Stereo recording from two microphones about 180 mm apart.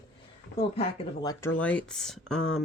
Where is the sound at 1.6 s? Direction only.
5° left (ahead or behind).